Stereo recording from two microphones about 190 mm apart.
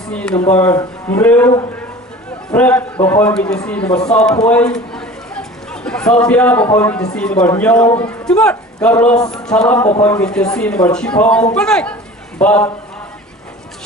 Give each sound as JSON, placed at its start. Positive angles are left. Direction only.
{"t": 0.1, "sound": "a man's voice", "side_deg": 5}
{"t": 4.4, "sound": "chatter", "side_deg": 5}
{"t": 6.2, "sound": "a man's voice", "side_deg": 5}